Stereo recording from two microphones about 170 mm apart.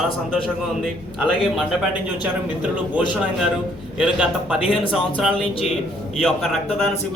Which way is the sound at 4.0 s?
5° right (ahead or behind).